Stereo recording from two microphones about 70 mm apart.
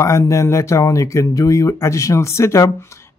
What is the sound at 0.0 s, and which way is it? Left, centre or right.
Speech, left.